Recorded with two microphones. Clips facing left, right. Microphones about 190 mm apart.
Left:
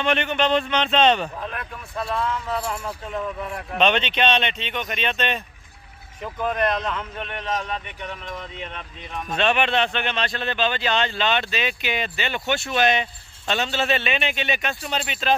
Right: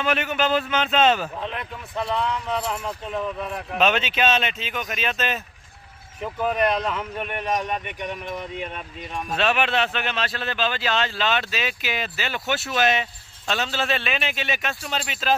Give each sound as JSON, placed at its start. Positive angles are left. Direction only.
{"t": 0.0, "sound": "speech", "side_deg": -5}
{"t": 1.4, "sound": "speech", "side_deg": -20}
{"t": 2.4, "sound": "speech", "side_deg": 5}
{"t": 2.8, "sound": "speech", "side_deg": -5}